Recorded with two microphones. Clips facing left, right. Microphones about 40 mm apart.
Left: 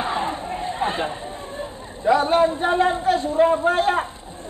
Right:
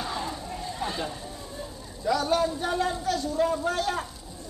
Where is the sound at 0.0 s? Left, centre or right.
Left.